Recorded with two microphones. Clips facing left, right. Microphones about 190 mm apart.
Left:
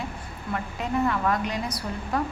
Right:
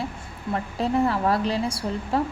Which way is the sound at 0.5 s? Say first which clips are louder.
Right 4 dB; 35° right (ahead or behind).